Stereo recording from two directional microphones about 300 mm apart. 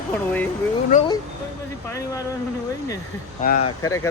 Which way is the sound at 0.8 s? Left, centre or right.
Left.